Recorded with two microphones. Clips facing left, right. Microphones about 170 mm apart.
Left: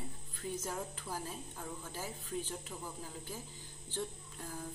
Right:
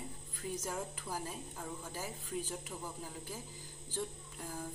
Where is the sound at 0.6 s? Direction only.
10° right (ahead or behind).